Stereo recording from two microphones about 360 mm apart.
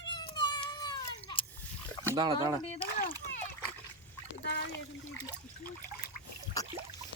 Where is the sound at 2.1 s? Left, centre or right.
Centre.